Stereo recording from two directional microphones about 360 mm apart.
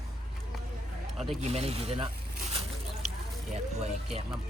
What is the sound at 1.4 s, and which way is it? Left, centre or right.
Speech, centre.